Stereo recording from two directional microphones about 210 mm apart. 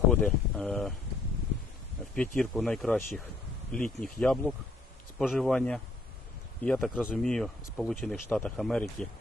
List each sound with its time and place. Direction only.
0.1 s speech: 5° left (ahead or behind)
2.1 s speech: 5° left (ahead or behind)